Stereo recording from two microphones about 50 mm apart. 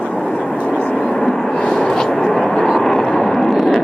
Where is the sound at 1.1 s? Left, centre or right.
Centre.